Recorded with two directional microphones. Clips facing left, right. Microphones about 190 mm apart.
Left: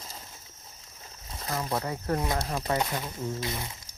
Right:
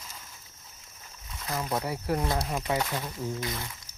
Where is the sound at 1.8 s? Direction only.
10° right (ahead or behind).